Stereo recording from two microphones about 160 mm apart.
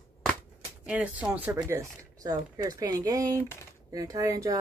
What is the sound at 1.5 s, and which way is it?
Speech, 20° right (ahead or behind).